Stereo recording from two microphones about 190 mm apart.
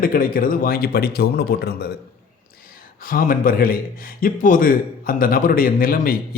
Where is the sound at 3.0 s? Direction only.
50° left (ahead or behind).